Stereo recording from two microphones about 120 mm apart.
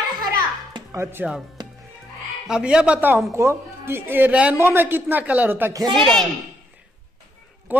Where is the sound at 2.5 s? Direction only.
5° right (ahead or behind).